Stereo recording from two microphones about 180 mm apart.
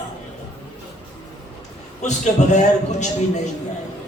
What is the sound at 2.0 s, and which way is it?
A man's voice, 40° left (ahead or behind).